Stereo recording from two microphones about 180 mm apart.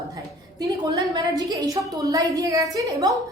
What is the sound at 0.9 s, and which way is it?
A woman's voice, 20° right (ahead or behind).